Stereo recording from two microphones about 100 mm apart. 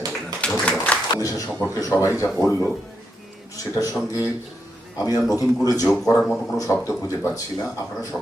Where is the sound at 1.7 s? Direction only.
35° left (ahead or behind).